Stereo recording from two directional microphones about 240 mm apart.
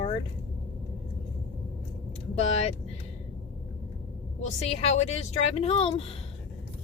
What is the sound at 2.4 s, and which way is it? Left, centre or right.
Speech, left.